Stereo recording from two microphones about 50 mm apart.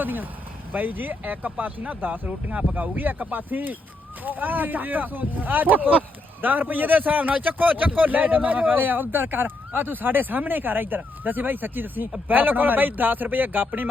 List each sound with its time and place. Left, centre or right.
0.0 s a man's voice: right
2.2 s a man's voice: right